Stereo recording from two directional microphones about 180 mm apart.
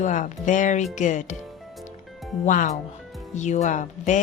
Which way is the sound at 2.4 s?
45° left (ahead or behind).